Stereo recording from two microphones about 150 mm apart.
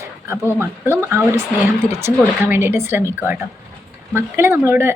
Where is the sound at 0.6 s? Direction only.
15° right (ahead or behind).